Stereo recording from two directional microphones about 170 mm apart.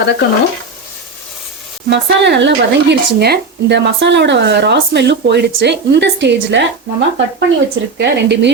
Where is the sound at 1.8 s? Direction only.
90° right.